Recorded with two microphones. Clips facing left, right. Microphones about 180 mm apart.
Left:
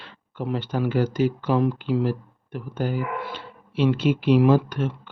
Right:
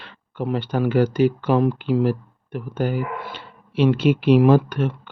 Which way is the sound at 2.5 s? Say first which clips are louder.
Right 3 dB; 65° right (ahead or behind).